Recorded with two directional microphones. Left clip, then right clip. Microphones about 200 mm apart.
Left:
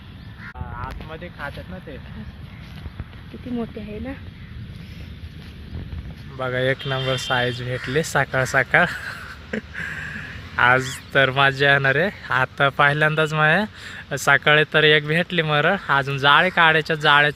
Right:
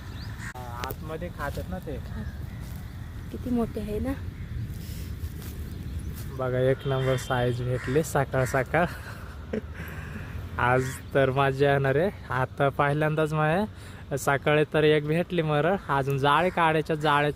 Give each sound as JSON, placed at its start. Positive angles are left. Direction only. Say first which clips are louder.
{"t": 1.1, "sound": "speech", "louder": "even", "side_deg": -50}
{"t": 3.6, "sound": "speech", "louder": "right 2 dB", "side_deg": -15}
{"t": 6.3, "sound": "speech", "louder": "left 3 dB", "side_deg": 0}